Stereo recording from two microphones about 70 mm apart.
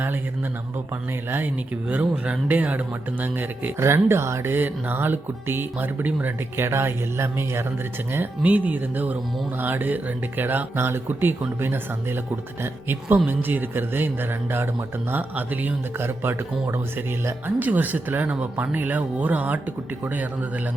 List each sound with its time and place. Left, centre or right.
1.9 s speech: centre
3.8 s speech: right
6.6 s speech: right
8.4 s speech: right